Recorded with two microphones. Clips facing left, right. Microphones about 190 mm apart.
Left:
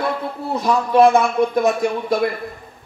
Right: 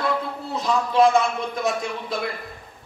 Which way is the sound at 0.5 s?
55° left (ahead or behind).